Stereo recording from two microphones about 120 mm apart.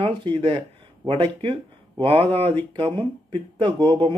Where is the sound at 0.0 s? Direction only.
45° right (ahead or behind).